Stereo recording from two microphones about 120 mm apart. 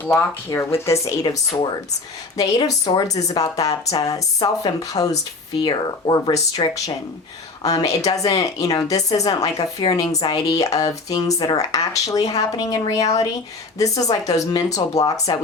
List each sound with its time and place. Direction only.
0.0 s speech: 20° left (ahead or behind)
2.4 s speech: 30° left (ahead or behind)